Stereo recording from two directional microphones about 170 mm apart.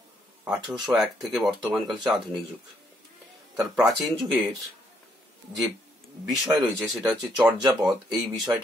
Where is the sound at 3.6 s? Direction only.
Centre (ahead or behind).